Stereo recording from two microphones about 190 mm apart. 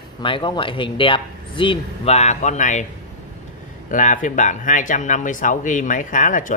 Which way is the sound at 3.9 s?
45° left (ahead or behind).